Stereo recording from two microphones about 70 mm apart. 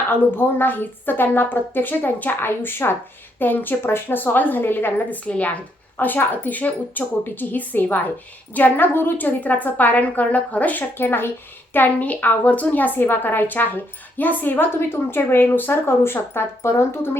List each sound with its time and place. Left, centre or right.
0.1 s a woman's voice: left
5.1 s a woman's voice: centre; by 17.1 s left